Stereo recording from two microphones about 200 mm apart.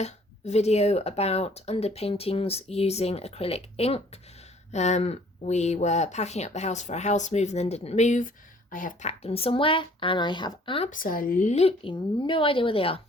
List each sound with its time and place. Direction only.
0.0 s speech: 35° left (ahead or behind)
10.9 s speech: 45° left (ahead or behind); by 13.0 s 25° left (ahead or behind)